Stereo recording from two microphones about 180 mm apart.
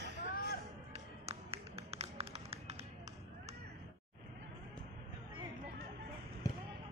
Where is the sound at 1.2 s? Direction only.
35° right (ahead or behind).